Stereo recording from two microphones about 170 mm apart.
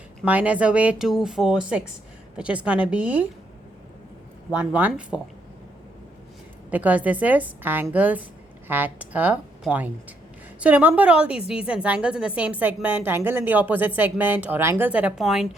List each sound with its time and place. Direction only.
0.3 s a woman's voice: 10° right (ahead or behind)
4.5 s a woman's voice: 10° right (ahead or behind)
6.7 s a woman's voice: 10° right (ahead or behind)